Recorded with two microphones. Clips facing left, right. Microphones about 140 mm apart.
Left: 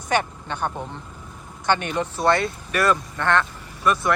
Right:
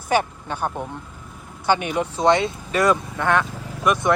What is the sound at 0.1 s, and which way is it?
Speech, 5° right (ahead or behind).